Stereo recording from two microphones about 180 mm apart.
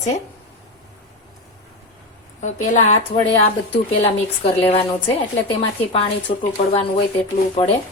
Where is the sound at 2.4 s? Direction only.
40° left (ahead or behind).